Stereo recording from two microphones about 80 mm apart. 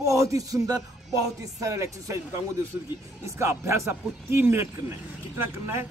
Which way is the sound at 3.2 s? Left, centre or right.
Right.